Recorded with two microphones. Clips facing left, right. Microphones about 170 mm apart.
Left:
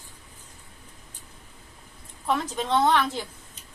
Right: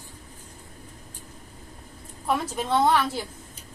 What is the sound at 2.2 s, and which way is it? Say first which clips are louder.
A woman's voice: even; 10° right (ahead or behind).